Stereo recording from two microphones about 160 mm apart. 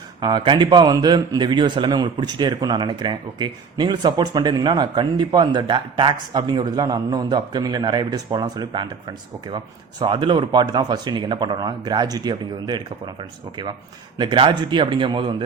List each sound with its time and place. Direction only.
0.2 s a man's voice: 30° right (ahead or behind)
14.2 s a man's voice: 30° right (ahead or behind)